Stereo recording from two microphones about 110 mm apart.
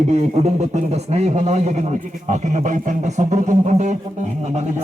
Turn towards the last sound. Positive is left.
turn(degrees=-90)